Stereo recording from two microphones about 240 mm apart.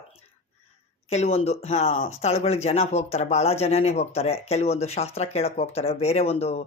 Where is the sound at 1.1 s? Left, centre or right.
Left.